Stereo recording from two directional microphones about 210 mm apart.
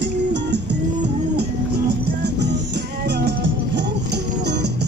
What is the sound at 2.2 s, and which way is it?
Music, 55° right (ahead or behind).